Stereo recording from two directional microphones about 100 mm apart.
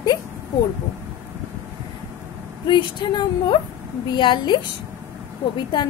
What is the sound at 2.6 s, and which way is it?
A woman's voice, 50° left (ahead or behind).